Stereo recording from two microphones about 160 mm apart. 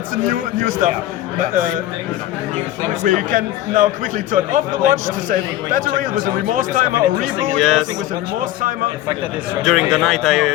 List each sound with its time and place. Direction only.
0.3 s a man's voice: 60° right (ahead or behind)
3.0 s a man's voice: 55° right (ahead or behind)
7.6 s speech: centre (ahead or behind)
9.6 s speech: centre (ahead or behind)